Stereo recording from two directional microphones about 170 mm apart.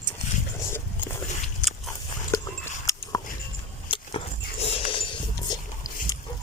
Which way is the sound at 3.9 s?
35° left (ahead or behind).